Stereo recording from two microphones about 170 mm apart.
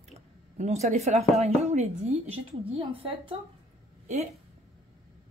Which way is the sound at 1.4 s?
40° right (ahead or behind).